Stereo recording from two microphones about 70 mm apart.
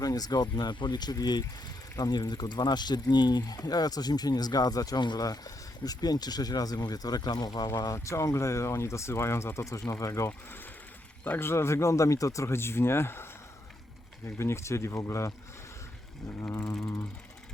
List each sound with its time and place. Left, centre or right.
0.0 s speech: left
7.9 s speech: left
14.3 s speech: left
16.8 s speech: left